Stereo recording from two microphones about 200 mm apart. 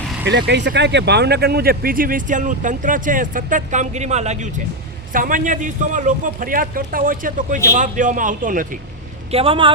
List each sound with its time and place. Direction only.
0.3 s a man's voice: 60° right (ahead or behind); by 8.8 s 40° right (ahead or behind)
9.3 s a man's voice: 25° right (ahead or behind)